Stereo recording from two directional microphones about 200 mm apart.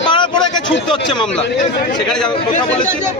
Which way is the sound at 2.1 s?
5° left (ahead or behind).